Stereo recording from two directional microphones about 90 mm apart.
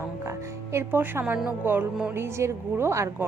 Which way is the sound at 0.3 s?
30° right (ahead or behind).